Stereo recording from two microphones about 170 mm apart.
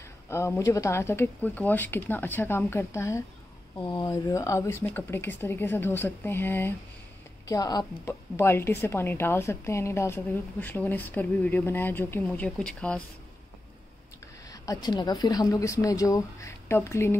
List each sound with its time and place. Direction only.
0.3 s a woman's voice: 15° left (ahead or behind)
14.5 s speech: 20° left (ahead or behind)